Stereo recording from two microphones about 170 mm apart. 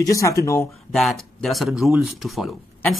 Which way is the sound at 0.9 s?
Centre (ahead or behind).